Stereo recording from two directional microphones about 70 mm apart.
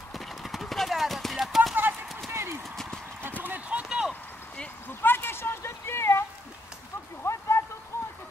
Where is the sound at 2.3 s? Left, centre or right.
Right.